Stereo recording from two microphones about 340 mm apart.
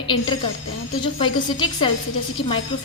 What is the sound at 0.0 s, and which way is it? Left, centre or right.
A woman's voice, centre.